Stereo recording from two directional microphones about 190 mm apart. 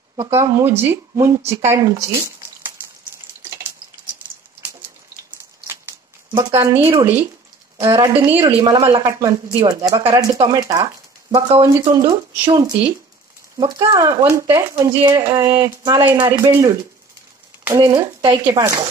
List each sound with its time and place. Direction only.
0.3 s speech: 15° right (ahead or behind)
5.7 s a sound: 15° right (ahead or behind)
6.7 s speech: 30° right (ahead or behind)
7.7 s speech: 20° right (ahead or behind)